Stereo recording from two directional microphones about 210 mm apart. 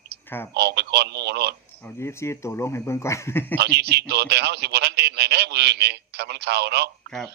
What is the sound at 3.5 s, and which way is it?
A man's voice, 50° right (ahead or behind).